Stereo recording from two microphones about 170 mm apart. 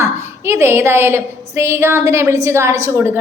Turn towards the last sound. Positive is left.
turn(degrees=-15)  # may be behind; listen again after turning